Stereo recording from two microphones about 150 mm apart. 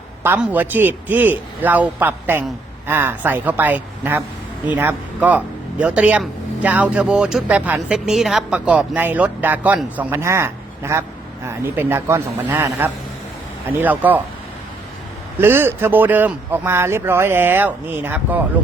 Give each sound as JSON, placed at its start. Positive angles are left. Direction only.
{"t": 0.2, "sound": "speech", "side_deg": -10}
{"t": 15.4, "sound": "speech", "side_deg": -15}